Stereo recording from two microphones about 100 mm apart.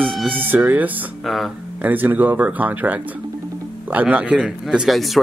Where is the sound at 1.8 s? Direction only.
15° right (ahead or behind).